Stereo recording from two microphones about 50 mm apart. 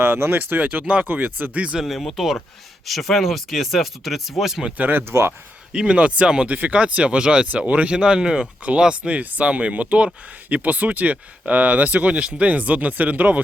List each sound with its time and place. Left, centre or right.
0.0 s speech: right
1.8 s speech: centre
4.8 s speech: right
5.7 s speech: centre
6.5 s speech: right
9.2 s speech: right
9.5 s speech: right